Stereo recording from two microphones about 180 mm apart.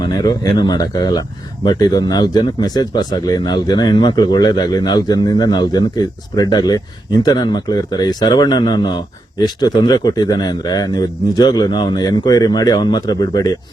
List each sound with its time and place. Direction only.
0.0 s speech: 20° left (ahead or behind)